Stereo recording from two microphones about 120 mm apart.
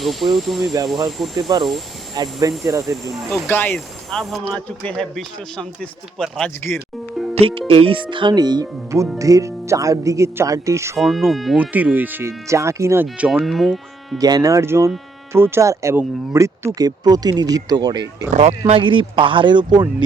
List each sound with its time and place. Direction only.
0.0 s speech: centre (ahead or behind)
0.6 s speech: 30° right (ahead or behind)
3.4 s speech: 15° left (ahead or behind)
7.3 s speech: 55° right (ahead or behind); by 11.0 s 25° right (ahead or behind)
11.0 s speech: centre (ahead or behind)
11.6 s speech: 15° right (ahead or behind)
13.1 s speech: 10° right (ahead or behind)
13.4 s speech: centre (ahead or behind)
14.2 s speech: 30° right (ahead or behind)
18.3 s speech: 70° right (ahead or behind); by 20.1 s 35° right (ahead or behind)